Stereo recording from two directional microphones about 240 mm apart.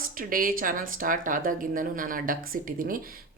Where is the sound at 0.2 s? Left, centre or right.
Right.